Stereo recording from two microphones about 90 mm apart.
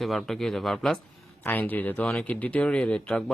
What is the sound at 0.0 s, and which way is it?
Speech, centre (ahead or behind).